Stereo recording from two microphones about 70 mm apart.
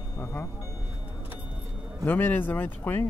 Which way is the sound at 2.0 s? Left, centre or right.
Left.